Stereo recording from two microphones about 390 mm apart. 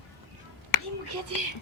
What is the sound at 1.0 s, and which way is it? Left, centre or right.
Speech, right.